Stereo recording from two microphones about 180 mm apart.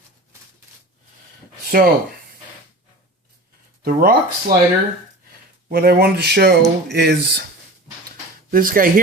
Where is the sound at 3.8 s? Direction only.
55° right (ahead or behind).